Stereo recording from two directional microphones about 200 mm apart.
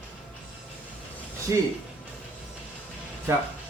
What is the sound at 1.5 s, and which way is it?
Speech, 15° right (ahead or behind).